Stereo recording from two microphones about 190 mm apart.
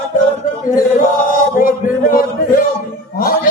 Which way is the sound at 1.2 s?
45° left (ahead or behind).